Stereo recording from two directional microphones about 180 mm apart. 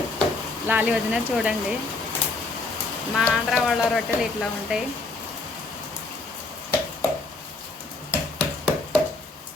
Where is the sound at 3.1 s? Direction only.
Centre (ahead or behind).